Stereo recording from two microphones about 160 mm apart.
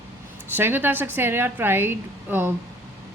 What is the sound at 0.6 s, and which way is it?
A woman's voice, 15° right (ahead or behind).